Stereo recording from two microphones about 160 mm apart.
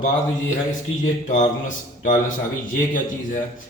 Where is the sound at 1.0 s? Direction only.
50° left (ahead or behind).